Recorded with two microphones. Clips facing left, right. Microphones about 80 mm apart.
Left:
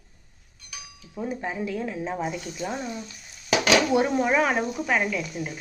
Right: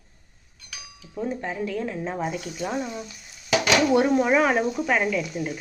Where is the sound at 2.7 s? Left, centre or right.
Centre.